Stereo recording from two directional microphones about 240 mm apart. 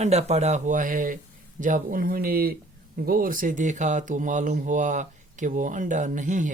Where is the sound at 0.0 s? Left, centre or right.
Right.